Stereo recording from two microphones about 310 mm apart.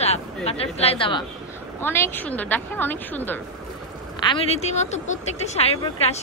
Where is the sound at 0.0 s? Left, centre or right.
Centre.